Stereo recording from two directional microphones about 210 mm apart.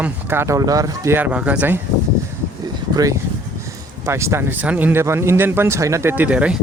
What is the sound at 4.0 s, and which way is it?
Speech, 15° right (ahead or behind).